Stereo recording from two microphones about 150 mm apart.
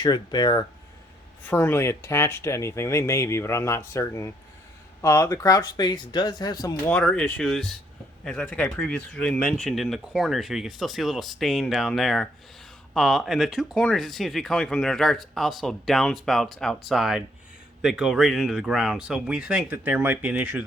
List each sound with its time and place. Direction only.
0.0 s speech: 30° left (ahead or behind)
1.5 s speech: 15° left (ahead or behind)
6.8 s speech: 5° left (ahead or behind); by 20.7 s 10° right (ahead or behind)